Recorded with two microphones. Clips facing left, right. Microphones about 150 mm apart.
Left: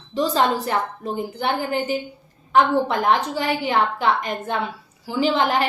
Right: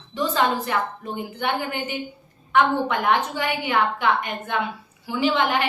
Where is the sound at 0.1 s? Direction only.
35° left (ahead or behind).